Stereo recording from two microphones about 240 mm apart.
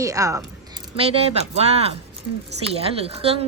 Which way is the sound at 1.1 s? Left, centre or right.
Right.